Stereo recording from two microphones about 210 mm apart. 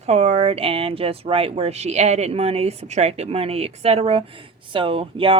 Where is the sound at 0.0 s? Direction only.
30° right (ahead or behind).